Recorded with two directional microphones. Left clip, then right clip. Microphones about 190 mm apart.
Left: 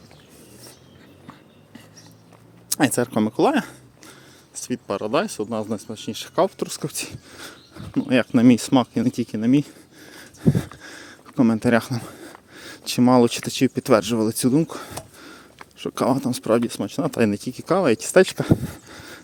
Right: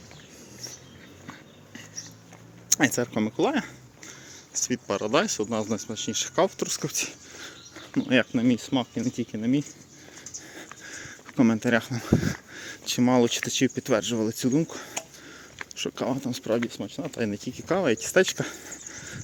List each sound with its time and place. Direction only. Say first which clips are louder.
2.6 s speech: left 3 dB; 25° left (ahead or behind)
4.6 s speech: left 2 dB; 20° left (ahead or behind)
8.3 s speech: left 8 dB; 45° left (ahead or behind)
10.5 s a sound: left 8 dB; 30° left (ahead or behind)
12.0 s speech: right 11 dB; centre (ahead or behind)
12.5 s speech: left 6 dB; 20° left (ahead or behind)
15.5 s a sound: right 1 dB; 5° left (ahead or behind)
16.0 s speech: left 10 dB; 35° left (ahead or behind)
16.6 s speech: left 8 dB; 55° left (ahead or behind); by 19.2 s 25° left (ahead or behind)